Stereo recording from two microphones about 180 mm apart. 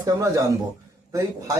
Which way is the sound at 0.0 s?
20° right (ahead or behind).